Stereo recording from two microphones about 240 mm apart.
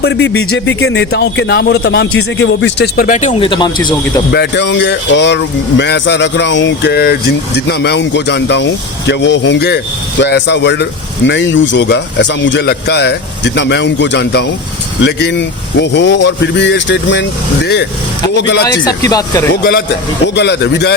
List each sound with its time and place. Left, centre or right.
0.0 s speech: left; by 4.2 s centre
4.3 s speech: left
18.4 s speech: left
18.9 s speech: centre
20.2 s speech: left